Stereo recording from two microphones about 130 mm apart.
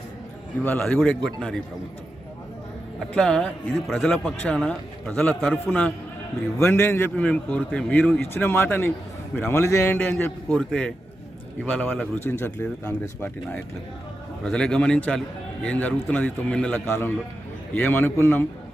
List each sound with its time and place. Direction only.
0.6 s a man's voice: 10° left (ahead or behind)
3.2 s a man's voice: 5° left (ahead or behind)